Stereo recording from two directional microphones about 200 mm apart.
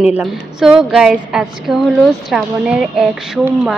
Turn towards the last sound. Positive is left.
turn(degrees=-5)  # may be behind; listen again after turning